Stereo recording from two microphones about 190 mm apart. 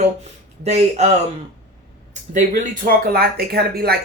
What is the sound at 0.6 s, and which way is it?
Speech, 35° right (ahead or behind).